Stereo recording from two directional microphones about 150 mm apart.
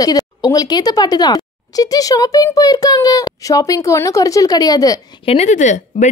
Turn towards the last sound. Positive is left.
turn(degrees=55)  # may be behind; listen again after turning